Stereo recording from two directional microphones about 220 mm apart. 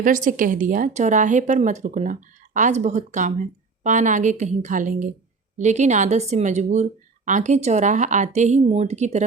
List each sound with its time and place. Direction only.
0.0 s a woman's voice: 35° right (ahead or behind)